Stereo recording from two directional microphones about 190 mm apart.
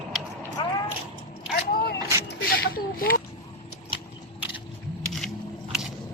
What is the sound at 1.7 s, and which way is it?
Vehicle, 50° left (ahead or behind).